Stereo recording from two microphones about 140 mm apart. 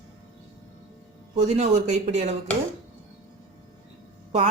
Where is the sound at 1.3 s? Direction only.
55° right (ahead or behind).